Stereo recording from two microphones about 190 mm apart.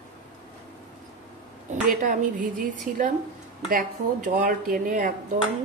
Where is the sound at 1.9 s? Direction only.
45° right (ahead or behind).